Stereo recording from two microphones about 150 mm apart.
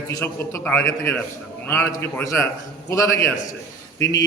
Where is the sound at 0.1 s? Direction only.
20° left (ahead or behind).